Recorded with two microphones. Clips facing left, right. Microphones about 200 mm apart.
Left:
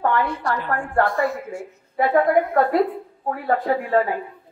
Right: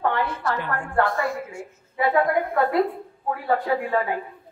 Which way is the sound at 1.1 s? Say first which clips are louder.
Left 3 dB; centre (ahead or behind).